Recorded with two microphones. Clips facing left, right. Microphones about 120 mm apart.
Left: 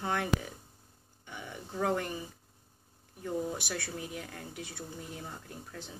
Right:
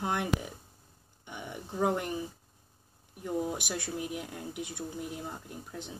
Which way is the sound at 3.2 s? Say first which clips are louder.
Right 2 dB; 15° right (ahead or behind).